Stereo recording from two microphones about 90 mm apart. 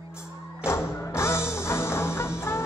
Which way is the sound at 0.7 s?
30° left (ahead or behind).